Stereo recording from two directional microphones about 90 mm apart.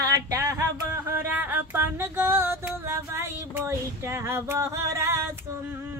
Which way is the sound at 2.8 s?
30° right (ahead or behind).